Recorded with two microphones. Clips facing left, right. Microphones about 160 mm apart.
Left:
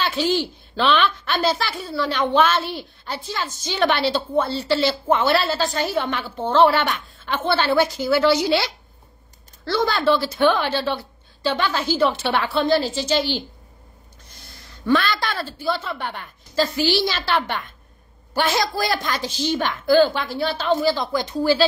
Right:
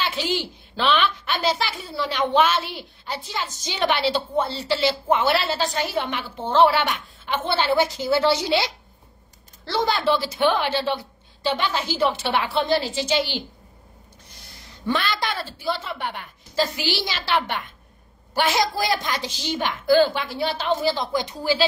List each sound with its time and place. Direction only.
0.0 s a woman's voice: 15° right (ahead or behind)
9.8 s a woman's voice: 15° right (ahead or behind)
14.9 s a woman's voice: 15° right (ahead or behind)